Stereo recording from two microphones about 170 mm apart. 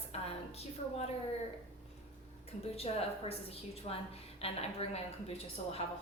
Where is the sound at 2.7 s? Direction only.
35° left (ahead or behind).